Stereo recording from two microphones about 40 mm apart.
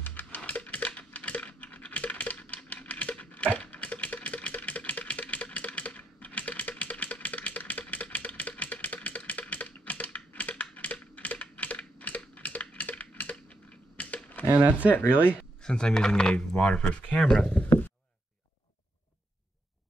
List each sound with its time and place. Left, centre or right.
0.0 s music: left
0.5 s coin: left
3.5 s typewriter: left
8.8 s typing: left
13.9 s computer keyboard: left
14.9 s speech: left
15.6 s speech: centre
16.8 s speech: left
17.2 s speech: centre